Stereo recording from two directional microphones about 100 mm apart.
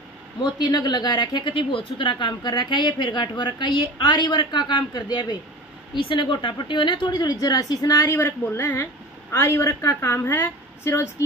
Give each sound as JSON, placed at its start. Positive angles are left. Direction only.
{"t": 0.4, "sound": "a woman's voice", "side_deg": 45}
{"t": 8.1, "sound": "a woman's voice", "side_deg": 20}